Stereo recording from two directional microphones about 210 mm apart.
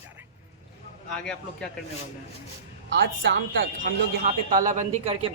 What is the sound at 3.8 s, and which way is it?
Speech, 40° right (ahead or behind).